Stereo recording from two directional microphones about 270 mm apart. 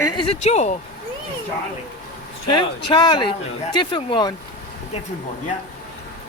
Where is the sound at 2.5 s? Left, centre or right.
Centre.